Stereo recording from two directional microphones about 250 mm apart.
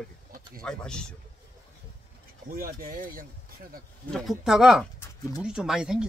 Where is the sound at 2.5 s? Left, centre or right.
Right.